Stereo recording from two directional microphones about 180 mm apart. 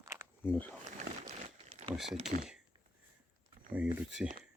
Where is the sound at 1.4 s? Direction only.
30° right (ahead or behind).